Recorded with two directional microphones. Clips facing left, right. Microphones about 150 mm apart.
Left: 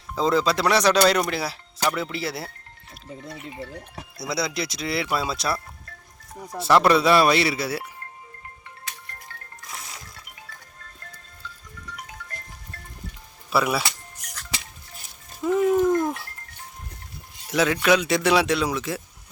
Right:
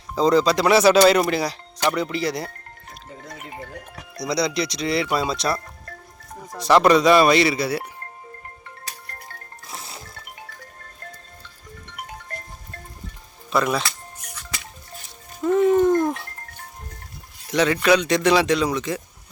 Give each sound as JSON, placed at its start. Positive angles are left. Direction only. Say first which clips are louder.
{"t": 0.2, "sound": "speech", "louder": "right 4 dB", "side_deg": 0}
{"t": 3.2, "sound": "speech", "louder": "even", "side_deg": -50}
{"t": 4.2, "sound": "speech", "louder": "right 5 dB", "side_deg": 5}
{"t": 6.6, "sound": "speech", "louder": "right 3 dB", "side_deg": 5}
{"t": 8.6, "sound": "music", "louder": "right 2 dB", "side_deg": -35}
{"t": 13.5, "sound": "speech", "louder": "right 1 dB", "side_deg": 5}
{"t": 15.4, "sound": "speech", "louder": "right 3 dB", "side_deg": 5}
{"t": 17.5, "sound": "speech", "louder": "right 2 dB", "side_deg": 0}